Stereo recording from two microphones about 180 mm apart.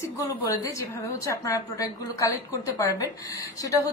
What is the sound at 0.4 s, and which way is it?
A woman's voice, 20° left (ahead or behind).